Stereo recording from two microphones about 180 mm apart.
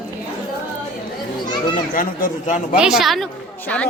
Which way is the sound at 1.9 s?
45° left (ahead or behind).